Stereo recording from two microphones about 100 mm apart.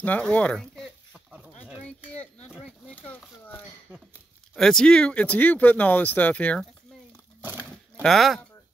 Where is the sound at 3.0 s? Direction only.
15° left (ahead or behind).